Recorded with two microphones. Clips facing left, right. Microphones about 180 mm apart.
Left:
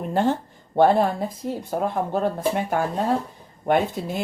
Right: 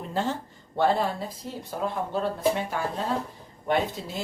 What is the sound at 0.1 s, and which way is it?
Speech, 55° left (ahead or behind).